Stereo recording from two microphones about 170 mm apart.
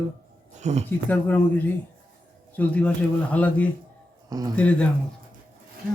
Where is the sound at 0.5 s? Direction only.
40° right (ahead or behind).